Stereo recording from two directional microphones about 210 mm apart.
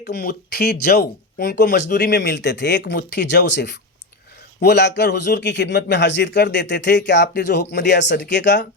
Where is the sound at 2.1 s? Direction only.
55° left (ahead or behind).